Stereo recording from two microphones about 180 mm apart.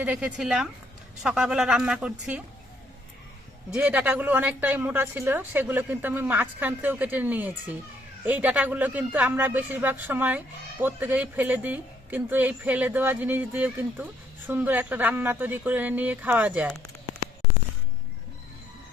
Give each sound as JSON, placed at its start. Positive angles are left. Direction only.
{"t": 0.0, "sound": "a woman's voice", "side_deg": -5}
{"t": 3.7, "sound": "speech", "side_deg": -5}
{"t": 17.2, "sound": "a sound", "side_deg": -35}